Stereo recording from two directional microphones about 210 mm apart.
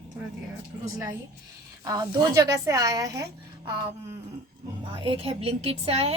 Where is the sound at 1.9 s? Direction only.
15° right (ahead or behind).